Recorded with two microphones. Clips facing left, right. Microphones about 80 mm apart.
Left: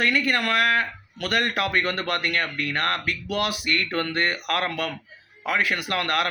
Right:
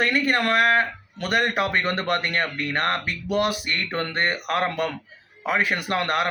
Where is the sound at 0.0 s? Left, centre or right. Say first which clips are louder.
Right 1 dB; right.